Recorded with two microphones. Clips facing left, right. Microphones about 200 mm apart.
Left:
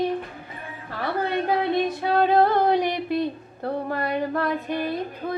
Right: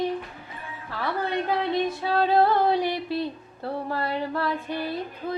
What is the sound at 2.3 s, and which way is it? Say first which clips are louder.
Music: right 1 dB; 50° left (ahead or behind).